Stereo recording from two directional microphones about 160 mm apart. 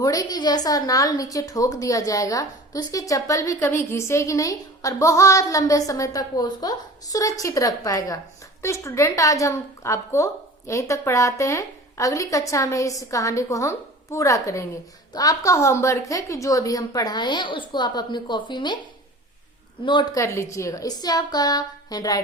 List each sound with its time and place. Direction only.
0.0 s a woman's voice: 20° left (ahead or behind)
19.8 s a woman's voice: 30° left (ahead or behind)